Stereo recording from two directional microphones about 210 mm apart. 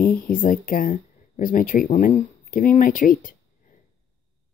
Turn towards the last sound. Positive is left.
turn(degrees=40)  # may be behind; listen again after turning